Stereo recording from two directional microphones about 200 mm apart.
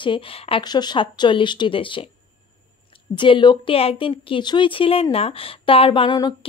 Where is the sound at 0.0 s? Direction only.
25° left (ahead or behind).